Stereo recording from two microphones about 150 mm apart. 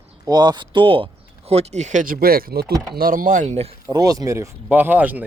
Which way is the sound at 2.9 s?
70° right (ahead or behind).